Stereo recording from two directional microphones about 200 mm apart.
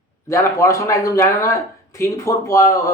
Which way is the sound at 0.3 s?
15° left (ahead or behind).